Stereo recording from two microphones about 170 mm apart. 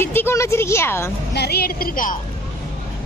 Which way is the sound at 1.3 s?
70° left (ahead or behind).